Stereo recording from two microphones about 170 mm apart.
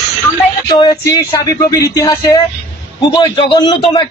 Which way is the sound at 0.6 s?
25° left (ahead or behind).